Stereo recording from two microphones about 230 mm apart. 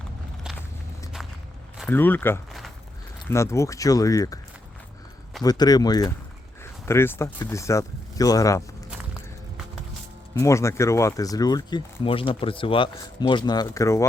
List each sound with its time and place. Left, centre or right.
1.8 s a sound: centre
3.2 s speech: centre
5.4 s speech: centre
10.3 s speech: centre